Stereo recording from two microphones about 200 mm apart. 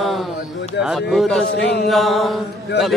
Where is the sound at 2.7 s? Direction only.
55° left (ahead or behind).